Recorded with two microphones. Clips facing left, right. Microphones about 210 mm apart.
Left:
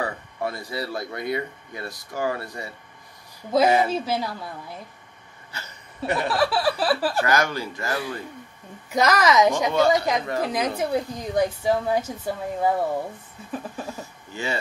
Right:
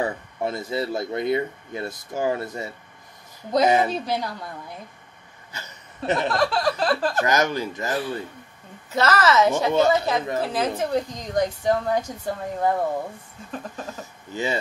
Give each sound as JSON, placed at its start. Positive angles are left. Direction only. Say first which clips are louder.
{"t": 0.0, "sound": "speech", "louder": "right 2 dB", "side_deg": -20}
{"t": 3.9, "sound": "a woman's voice", "louder": "left 1 dB", "side_deg": 5}
{"t": 6.2, "sound": "speech", "louder": "left 2 dB", "side_deg": 5}
{"t": 7.2, "sound": "speech", "louder": "right 1 dB", "side_deg": -20}
{"t": 8.9, "sound": "a woman's voice", "louder": "even", "side_deg": 15}
{"t": 14.3, "sound": "speech", "louder": "right 3 dB", "side_deg": -20}